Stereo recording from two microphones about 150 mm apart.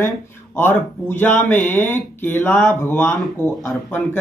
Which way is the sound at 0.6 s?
15° left (ahead or behind).